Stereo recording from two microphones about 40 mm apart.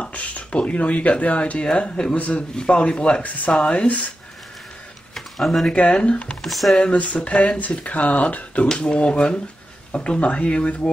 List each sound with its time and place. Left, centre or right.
0.0 s speech: left
2.1 s speech: left
2.5 s speech: left
3.2 s speech: left
3.5 s speech: left
3.8 s speech: left
5.1 s a sound: centre
5.7 s speech: left
6.4 s speech: centre
6.8 s speech: left